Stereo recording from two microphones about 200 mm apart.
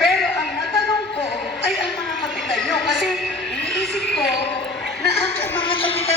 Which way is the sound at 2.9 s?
Centre (ahead or behind).